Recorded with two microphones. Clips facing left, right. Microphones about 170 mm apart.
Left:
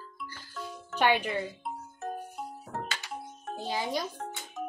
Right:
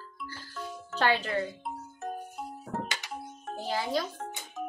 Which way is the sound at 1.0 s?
15° left (ahead or behind).